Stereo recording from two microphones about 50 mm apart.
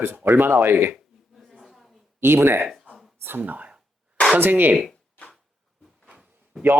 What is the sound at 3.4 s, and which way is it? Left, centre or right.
Speech, right.